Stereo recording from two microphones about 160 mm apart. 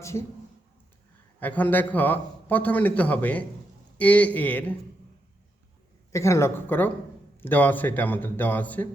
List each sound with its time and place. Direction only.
1.4 s a man's voice: 10° left (ahead or behind)
6.1 s a man's voice: 20° left (ahead or behind)